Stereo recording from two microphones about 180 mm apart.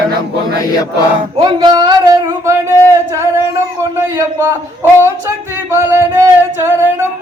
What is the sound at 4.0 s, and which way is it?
Speech, 15° right (ahead or behind).